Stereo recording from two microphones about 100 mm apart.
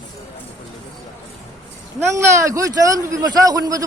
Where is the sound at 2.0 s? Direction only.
30° right (ahead or behind).